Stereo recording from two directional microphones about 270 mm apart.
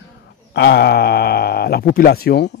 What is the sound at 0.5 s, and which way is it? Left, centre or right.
A man's voice, left.